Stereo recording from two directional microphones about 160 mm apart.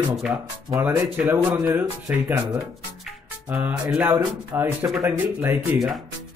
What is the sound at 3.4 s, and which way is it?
Speech, 10° right (ahead or behind).